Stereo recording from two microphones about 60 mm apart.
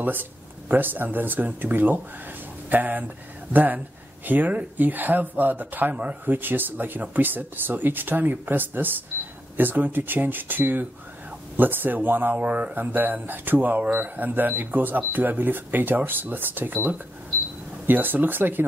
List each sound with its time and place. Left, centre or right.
0.0 s speech: right